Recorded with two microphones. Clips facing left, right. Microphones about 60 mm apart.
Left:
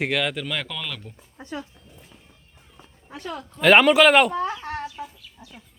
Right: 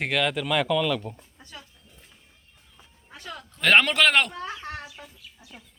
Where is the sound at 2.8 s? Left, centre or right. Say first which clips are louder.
Left 8 dB; centre.